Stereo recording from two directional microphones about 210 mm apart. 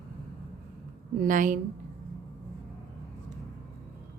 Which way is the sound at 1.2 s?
40° right (ahead or behind).